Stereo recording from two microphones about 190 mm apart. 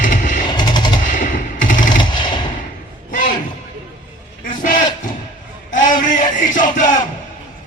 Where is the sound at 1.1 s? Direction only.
45° left (ahead or behind).